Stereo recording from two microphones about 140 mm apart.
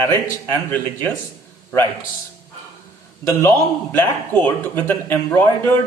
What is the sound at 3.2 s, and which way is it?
A man's voice, 20° left (ahead or behind).